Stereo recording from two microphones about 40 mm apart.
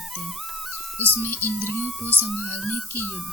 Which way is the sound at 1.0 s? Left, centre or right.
Left.